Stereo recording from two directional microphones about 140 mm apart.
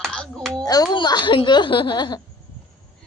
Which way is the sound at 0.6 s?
25° left (ahead or behind).